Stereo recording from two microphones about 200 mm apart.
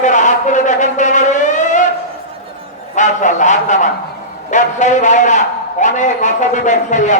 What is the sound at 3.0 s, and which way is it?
A man's voice, 35° left (ahead or behind).